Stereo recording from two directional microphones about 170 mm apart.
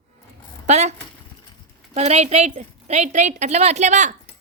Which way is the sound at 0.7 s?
40° right (ahead or behind).